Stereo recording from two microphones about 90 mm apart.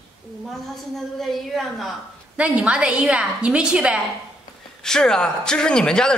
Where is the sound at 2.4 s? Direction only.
15° right (ahead or behind).